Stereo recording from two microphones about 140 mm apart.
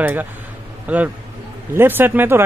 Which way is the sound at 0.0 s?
15° right (ahead or behind).